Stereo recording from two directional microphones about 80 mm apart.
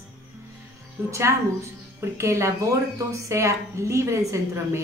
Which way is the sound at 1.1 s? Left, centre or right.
Right.